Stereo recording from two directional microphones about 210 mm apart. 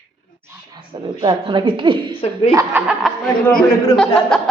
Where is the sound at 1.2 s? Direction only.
25° right (ahead or behind).